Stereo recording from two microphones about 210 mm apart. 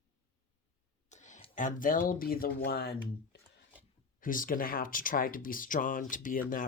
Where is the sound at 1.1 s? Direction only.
35° left (ahead or behind).